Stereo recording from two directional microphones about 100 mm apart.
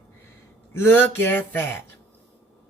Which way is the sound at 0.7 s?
20° left (ahead or behind).